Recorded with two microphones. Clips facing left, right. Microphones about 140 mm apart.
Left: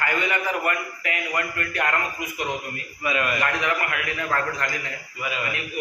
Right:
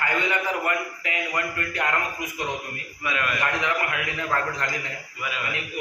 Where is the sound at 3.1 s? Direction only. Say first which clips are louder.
Left 3 dB; 5° left (ahead or behind).